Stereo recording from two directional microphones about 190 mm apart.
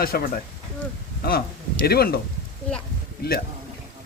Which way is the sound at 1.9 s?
55° left (ahead or behind).